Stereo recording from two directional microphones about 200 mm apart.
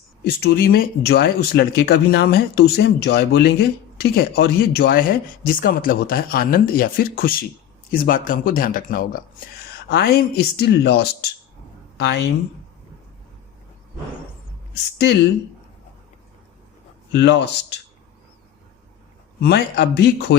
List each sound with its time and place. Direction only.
0.3 s speech: 55° left (ahead or behind)
14.9 s speech: 55° left (ahead or behind)
17.1 s speech: 60° left (ahead or behind)
19.4 s speech: 55° left (ahead or behind)